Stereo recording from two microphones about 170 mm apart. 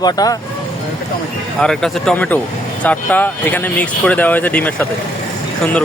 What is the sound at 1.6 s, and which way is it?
Speech, 5° left (ahead or behind).